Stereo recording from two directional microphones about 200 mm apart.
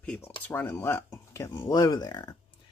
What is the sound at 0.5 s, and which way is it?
Speech, 10° left (ahead or behind).